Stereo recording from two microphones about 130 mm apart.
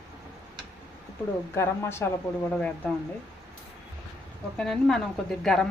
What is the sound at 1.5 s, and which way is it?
A woman's voice, 20° left (ahead or behind).